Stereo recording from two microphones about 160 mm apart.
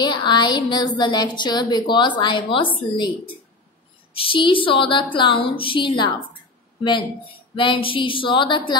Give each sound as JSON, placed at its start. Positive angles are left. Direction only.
{"t": 0.0, "sound": "a woman's voice", "side_deg": 30}
{"t": 4.1, "sound": "speech", "side_deg": 35}